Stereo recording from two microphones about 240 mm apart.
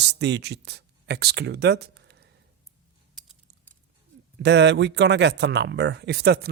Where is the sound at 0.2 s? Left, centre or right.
Right.